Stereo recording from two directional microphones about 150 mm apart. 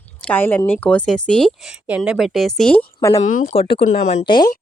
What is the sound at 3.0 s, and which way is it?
Speech, 20° left (ahead or behind).